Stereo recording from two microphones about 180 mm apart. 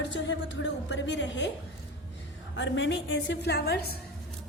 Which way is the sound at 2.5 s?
90° left.